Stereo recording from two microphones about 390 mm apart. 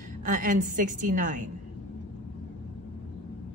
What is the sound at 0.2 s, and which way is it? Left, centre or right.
A woman's voice, centre.